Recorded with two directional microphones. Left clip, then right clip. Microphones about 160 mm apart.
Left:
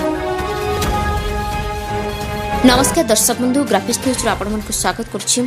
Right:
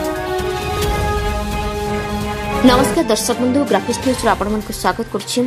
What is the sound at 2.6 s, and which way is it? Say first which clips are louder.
Speech: even; 15° left (ahead or behind).